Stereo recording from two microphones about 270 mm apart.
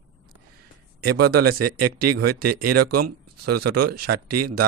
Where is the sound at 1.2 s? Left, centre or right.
Right.